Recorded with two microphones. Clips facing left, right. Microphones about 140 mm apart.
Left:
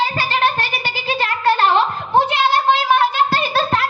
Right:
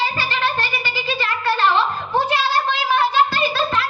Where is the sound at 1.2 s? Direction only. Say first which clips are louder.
Left 5 dB; 55° left (ahead or behind).